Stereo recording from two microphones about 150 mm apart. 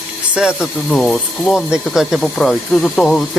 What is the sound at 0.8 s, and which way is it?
Speech, 5° left (ahead or behind).